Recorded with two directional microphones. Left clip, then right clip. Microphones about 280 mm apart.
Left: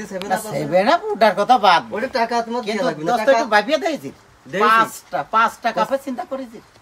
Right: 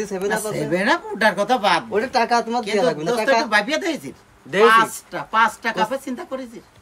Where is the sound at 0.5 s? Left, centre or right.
Centre.